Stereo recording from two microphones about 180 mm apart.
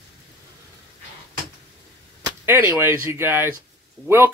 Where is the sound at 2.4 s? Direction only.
10° right (ahead or behind).